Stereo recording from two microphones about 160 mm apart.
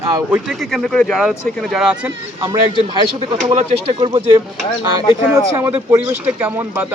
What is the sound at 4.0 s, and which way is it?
Speech, 30° right (ahead or behind).